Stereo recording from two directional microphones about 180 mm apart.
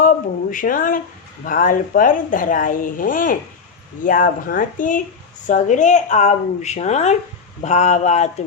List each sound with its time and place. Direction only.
0.5 s speech: 50° left (ahead or behind)